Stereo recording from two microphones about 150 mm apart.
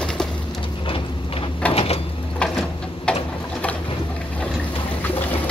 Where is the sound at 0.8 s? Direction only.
35° left (ahead or behind).